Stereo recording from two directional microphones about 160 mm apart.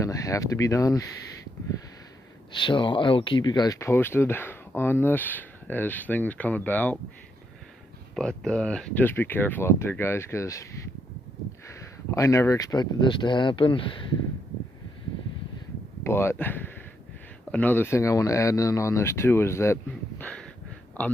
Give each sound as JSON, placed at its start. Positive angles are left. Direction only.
{"t": 0.0, "sound": "speech", "side_deg": 20}
{"t": 2.5, "sound": "speech", "side_deg": 30}
{"t": 8.1, "sound": "speech", "side_deg": 5}
{"t": 11.7, "sound": "speech", "side_deg": 20}
{"t": 16.0, "sound": "speech", "side_deg": 15}